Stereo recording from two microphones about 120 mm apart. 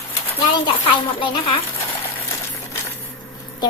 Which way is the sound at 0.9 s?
45° left (ahead or behind).